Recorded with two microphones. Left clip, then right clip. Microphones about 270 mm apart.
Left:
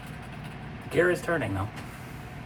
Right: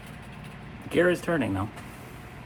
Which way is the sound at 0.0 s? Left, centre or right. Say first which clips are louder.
Left 2 dB; centre.